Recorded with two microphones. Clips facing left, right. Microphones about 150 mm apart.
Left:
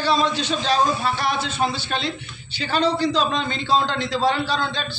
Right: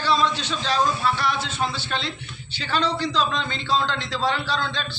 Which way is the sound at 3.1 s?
50° left (ahead or behind).